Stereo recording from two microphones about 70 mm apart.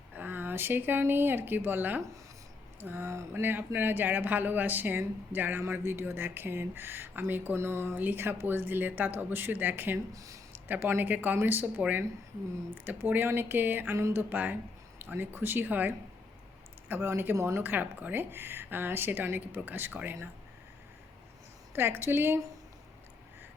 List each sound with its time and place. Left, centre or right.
0.2 s a woman's voice: right
3.1 s speech: right
3.4 s speech: right
10.1 s speech: right
10.7 s speech: right
13.9 s speech: right
14.2 s speech: right
16.9 s a woman's voice: right
21.8 s a woman's voice: right